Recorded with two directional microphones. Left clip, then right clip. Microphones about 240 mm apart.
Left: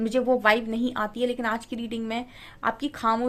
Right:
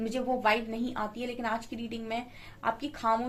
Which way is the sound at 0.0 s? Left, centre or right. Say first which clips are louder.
Left 7 dB; left.